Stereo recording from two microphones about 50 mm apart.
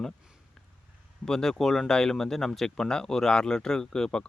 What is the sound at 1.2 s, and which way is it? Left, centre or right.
Speech, centre.